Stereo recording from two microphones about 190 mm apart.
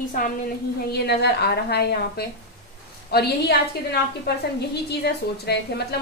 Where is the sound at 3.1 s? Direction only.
60° left (ahead or behind).